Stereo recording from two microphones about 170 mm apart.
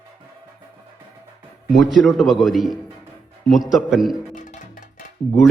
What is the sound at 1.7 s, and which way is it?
A man's voice, centre (ahead or behind).